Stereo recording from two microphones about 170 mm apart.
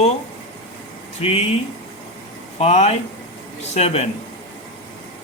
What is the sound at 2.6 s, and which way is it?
Speech, 40° left (ahead or behind).